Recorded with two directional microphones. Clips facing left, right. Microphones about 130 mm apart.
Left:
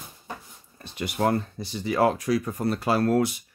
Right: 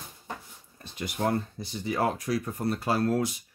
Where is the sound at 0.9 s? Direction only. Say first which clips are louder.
Left 4 dB; 75° left (ahead or behind).